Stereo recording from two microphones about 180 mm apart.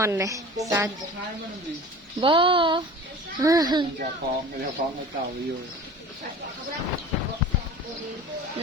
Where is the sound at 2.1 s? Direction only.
25° right (ahead or behind).